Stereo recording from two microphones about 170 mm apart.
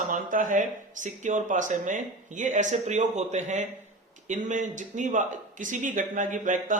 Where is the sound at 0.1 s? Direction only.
50° right (ahead or behind).